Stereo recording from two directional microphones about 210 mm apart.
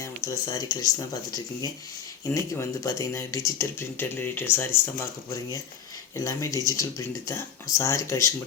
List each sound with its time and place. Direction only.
0.0 s speech: 15° left (ahead or behind)
6.1 s speech: 15° left (ahead or behind)